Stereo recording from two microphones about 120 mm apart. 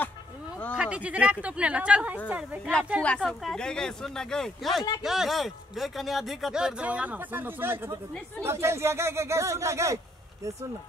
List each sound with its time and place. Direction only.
0.7 s speech: 10° right (ahead or behind)
3.2 s speech: centre (ahead or behind); by 9.9 s 25° right (ahead or behind)